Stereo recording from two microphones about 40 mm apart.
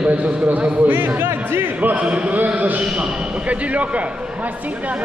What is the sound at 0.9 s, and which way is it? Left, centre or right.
Speech, right.